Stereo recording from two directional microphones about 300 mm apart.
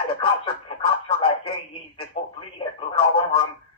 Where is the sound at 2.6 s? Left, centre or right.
Centre.